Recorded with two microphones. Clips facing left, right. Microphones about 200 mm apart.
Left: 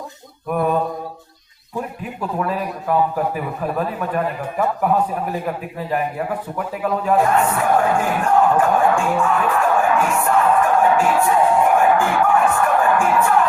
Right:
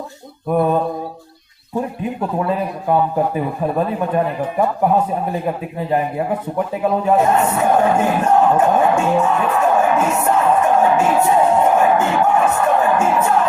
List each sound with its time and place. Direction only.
0.5 s a man's voice: 25° right (ahead or behind)
2.0 s a man's voice: 25° right (ahead or behind)
5.9 s a man's voice: 25° right (ahead or behind)